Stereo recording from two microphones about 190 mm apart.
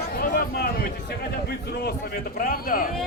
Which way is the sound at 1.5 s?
55° left (ahead or behind).